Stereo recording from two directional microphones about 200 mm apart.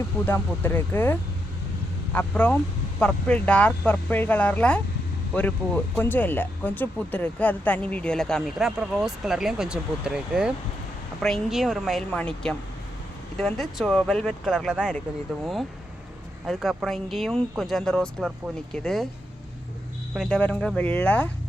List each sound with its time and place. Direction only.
0.3 s speech: 10° left (ahead or behind)
2.1 s speech: 5° left (ahead or behind)
16.5 s speech: centre (ahead or behind)
20.1 s speech: 5° left (ahead or behind)